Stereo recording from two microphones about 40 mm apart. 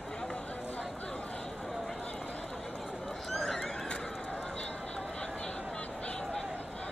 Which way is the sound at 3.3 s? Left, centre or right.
Centre.